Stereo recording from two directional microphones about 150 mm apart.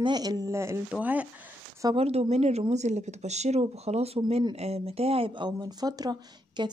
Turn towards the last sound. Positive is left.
turn(degrees=-30)  # may be behind; listen again after turning